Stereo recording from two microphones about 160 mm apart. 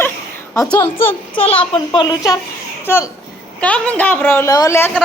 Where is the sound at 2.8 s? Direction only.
15° left (ahead or behind).